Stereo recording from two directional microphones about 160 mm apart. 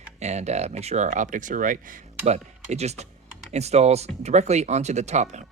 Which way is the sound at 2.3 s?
45° right (ahead or behind).